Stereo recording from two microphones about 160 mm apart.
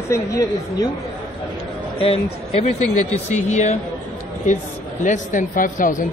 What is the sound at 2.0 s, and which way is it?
Speech, 35° left (ahead or behind).